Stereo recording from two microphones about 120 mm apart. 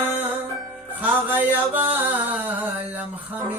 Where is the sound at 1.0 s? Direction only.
15° right (ahead or behind).